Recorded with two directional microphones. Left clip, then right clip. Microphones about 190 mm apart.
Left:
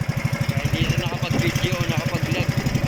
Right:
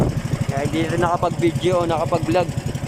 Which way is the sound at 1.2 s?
30° right (ahead or behind).